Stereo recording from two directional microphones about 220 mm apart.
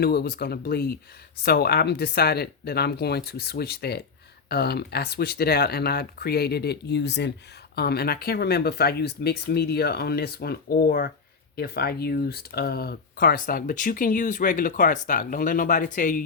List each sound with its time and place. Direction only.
0.0 s speech: 45° left (ahead or behind)